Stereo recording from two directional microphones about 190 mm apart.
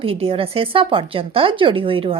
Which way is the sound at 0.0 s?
30° right (ahead or behind).